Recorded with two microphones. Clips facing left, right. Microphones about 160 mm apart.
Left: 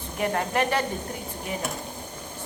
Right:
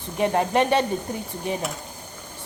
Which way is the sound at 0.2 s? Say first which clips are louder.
Right 5 dB; 25° right (ahead or behind).